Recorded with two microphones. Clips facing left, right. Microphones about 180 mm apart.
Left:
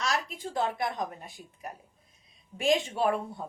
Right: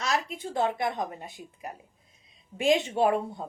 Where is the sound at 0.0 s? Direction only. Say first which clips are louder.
Right 2 dB; 25° right (ahead or behind).